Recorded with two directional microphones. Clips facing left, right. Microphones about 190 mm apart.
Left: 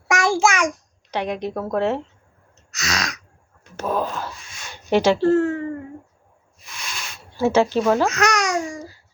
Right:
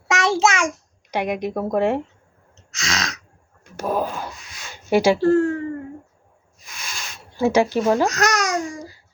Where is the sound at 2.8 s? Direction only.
25° right (ahead or behind).